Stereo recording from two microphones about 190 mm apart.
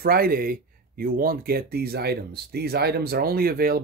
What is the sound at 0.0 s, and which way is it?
Speech, 50° right (ahead or behind).